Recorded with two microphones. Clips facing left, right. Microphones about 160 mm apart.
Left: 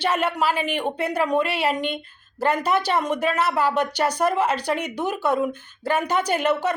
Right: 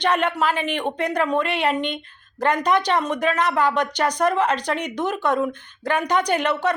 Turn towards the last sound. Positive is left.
turn(degrees=10)  # may be behind; listen again after turning